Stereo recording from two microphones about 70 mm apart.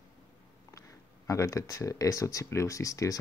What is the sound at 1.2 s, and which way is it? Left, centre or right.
Speech, left.